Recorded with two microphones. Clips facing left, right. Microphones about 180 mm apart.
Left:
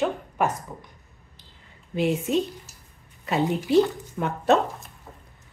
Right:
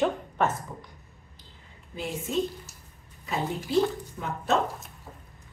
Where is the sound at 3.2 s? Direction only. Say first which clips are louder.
Left 6 dB; 70° left (ahead or behind).